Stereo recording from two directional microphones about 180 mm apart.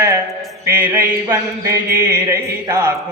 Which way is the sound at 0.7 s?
15° right (ahead or behind).